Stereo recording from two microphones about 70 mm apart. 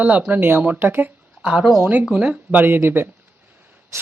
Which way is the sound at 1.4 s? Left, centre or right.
Centre.